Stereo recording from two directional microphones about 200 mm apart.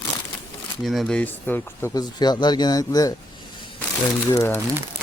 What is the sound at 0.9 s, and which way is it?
Speech, centre (ahead or behind).